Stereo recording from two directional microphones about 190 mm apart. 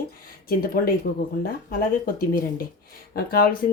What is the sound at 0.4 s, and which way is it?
Speech, 50° left (ahead or behind).